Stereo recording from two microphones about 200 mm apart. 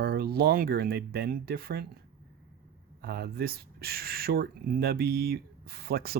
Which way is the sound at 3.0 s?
50° right (ahead or behind).